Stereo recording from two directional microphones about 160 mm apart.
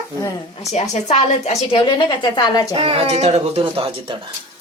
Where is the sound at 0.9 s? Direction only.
45° left (ahead or behind).